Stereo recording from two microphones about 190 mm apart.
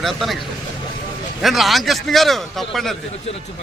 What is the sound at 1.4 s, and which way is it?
A man's voice, centre (ahead or behind).